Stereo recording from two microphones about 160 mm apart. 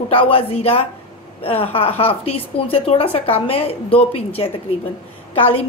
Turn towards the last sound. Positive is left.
turn(degrees=35)  # may be behind; listen again after turning